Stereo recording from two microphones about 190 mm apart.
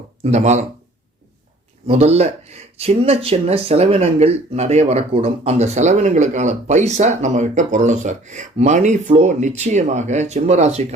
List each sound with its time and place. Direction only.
0.2 s speech: 35° right (ahead or behind)
1.9 s speech: 35° right (ahead or behind)